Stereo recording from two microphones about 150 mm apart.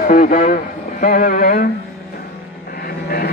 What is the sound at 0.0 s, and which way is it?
Speech, 60° left (ahead or behind).